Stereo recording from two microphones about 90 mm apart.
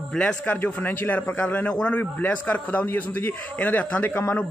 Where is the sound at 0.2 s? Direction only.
20° left (ahead or behind).